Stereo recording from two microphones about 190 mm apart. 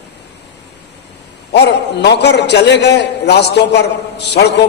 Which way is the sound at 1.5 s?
60° left (ahead or behind).